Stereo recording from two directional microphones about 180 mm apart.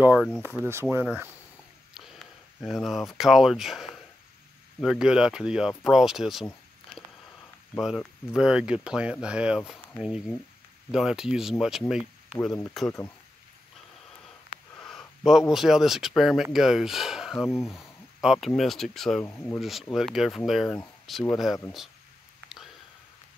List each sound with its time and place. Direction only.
0.0 s speech: 10° right (ahead or behind)
2.6 s speech: centre (ahead or behind)
7.8 s speech: centre (ahead or behind)
14.8 s a sound: 5° left (ahead or behind)
15.5 s speech: centre (ahead or behind)
19.2 s speech: 15° left (ahead or behind)
19.6 s speech: centre (ahead or behind)